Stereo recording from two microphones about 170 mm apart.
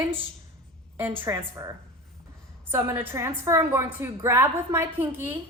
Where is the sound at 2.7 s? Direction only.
15° right (ahead or behind).